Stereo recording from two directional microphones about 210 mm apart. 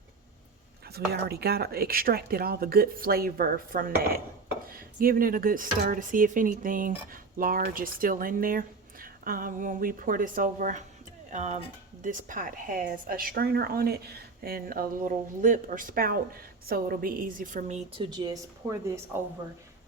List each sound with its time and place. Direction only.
0.9 s a woman's voice: 50° right (ahead or behind); by 18.0 s 30° right (ahead or behind)
18.1 s speech: 20° right (ahead or behind)